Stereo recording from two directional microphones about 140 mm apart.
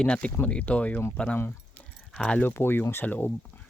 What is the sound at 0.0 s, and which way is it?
Speech, 10° left (ahead or behind).